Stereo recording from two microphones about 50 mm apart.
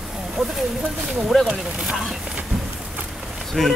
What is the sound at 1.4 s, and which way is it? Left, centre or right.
Speech, centre.